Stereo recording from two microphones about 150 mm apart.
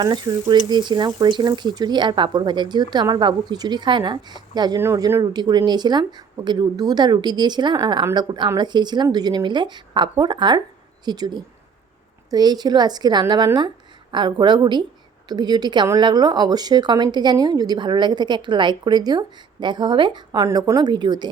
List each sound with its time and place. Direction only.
0.0 s speech: 25° right (ahead or behind)